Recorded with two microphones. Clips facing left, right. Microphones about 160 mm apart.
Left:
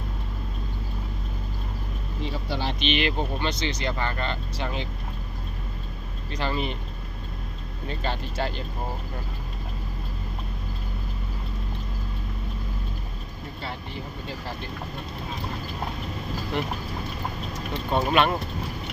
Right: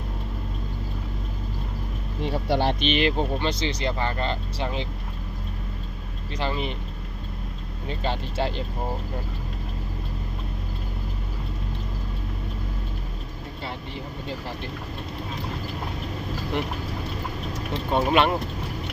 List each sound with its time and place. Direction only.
2.2 s a sound: 60° right (ahead or behind)
2.8 s speech: 35° right (ahead or behind)
6.3 s speech: 20° right (ahead or behind)
7.9 s speech: 20° right (ahead or behind)
17.9 s speech: 20° right (ahead or behind)